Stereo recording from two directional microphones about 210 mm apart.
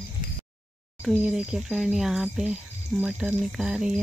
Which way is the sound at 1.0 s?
5° right (ahead or behind).